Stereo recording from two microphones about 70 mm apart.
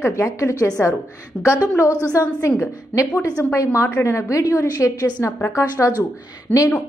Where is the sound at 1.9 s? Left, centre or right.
Right.